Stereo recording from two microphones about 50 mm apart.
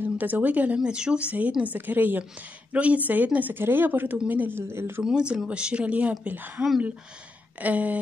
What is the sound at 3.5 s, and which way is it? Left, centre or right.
Speech, right.